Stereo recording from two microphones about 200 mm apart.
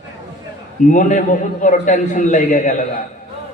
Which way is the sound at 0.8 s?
40° left (ahead or behind).